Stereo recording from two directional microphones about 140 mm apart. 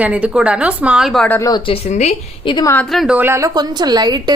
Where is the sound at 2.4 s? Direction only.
35° left (ahead or behind).